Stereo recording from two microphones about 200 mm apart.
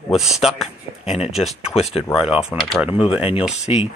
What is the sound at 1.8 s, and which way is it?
Speech, 30° left (ahead or behind).